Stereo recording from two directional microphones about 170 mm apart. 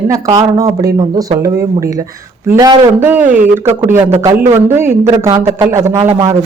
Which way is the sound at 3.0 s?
10° right (ahead or behind).